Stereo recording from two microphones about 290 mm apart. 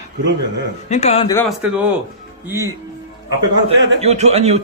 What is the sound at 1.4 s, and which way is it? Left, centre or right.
Speech, centre.